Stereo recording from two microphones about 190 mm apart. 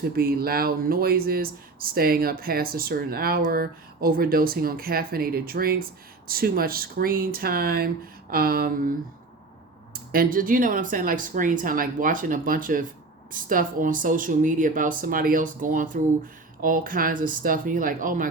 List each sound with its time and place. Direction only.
0.2 s speech: 50° right (ahead or behind)
9.9 s speech: 50° right (ahead or behind)